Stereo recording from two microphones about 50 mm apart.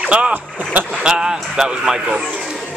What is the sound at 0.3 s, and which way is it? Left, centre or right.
Speech, right.